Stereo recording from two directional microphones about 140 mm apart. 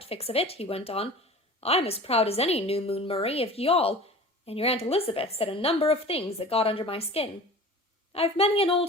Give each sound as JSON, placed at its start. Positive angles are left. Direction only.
{"t": 0.0, "sound": "a woman's voice", "side_deg": 45}